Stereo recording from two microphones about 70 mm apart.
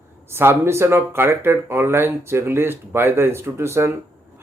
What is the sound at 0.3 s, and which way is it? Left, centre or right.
Speech, right.